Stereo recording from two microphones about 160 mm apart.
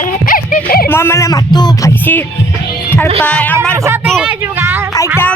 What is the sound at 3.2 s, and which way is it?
Speech, 10° left (ahead or behind).